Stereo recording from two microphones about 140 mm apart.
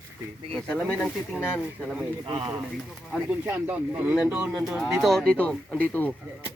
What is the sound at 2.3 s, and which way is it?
Speech, 35° right (ahead or behind).